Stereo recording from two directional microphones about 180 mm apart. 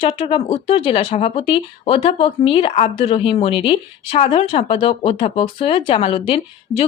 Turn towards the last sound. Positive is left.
turn(degrees=30)  # may be behind; listen again after turning